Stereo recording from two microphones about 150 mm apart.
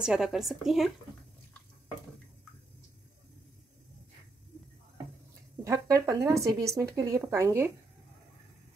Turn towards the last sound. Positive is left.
turn(degrees=-20)  # may be behind; listen again after turning